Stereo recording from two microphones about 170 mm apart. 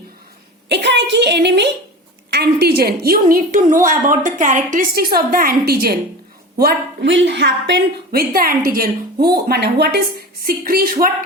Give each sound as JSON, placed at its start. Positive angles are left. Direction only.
{"t": 0.7, "sound": "a sound", "side_deg": -90}
{"t": 2.3, "sound": "a woman's voice", "side_deg": -75}
{"t": 6.6, "sound": "a woman's voice", "side_deg": -80}